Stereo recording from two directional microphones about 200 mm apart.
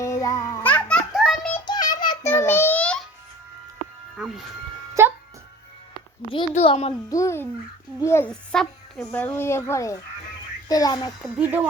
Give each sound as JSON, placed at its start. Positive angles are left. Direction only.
{"t": 0.0, "sound": "music", "side_deg": 15}
{"t": 1.5, "sound": "child singing", "side_deg": 20}
{"t": 2.2, "sound": "babbling", "side_deg": 10}
{"t": 5.0, "sound": "music", "side_deg": -15}
{"t": 6.5, "sound": "a child's voice", "side_deg": 35}
{"t": 7.1, "sound": "a child's voice", "side_deg": 15}
{"t": 11.3, "sound": "speech", "side_deg": -10}